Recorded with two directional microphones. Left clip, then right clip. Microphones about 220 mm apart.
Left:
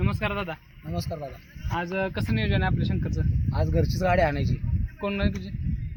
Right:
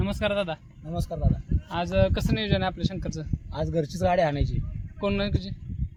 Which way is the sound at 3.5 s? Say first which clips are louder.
Even; 5° right (ahead or behind).